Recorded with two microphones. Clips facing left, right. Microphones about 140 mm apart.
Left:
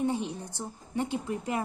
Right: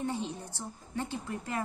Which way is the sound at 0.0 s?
15° left (ahead or behind).